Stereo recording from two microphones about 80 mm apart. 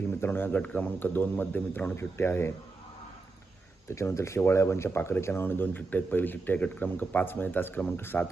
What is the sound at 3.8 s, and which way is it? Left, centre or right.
Speech, left.